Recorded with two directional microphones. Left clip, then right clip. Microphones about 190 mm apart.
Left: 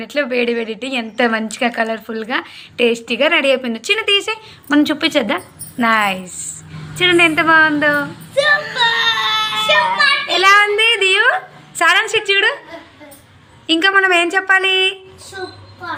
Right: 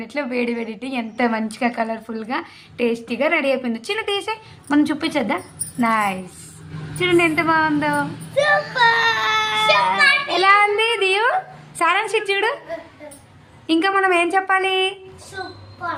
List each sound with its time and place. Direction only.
0.0 s a woman's voice: 10° left (ahead or behind)
9.0 s baby cry: 55° right (ahead or behind)
10.2 s a woman's voice: centre (ahead or behind)
13.7 s a woman's voice: 5° right (ahead or behind)